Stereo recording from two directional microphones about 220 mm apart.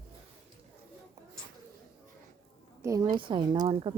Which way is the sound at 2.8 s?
15° right (ahead or behind).